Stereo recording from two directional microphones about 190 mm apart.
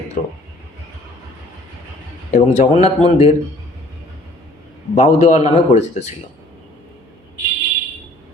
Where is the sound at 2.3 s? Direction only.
35° left (ahead or behind).